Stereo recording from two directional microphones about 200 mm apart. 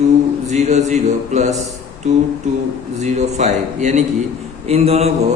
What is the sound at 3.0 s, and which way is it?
A man's voice, 35° right (ahead or behind).